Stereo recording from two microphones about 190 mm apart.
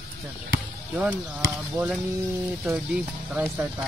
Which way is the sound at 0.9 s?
5° right (ahead or behind).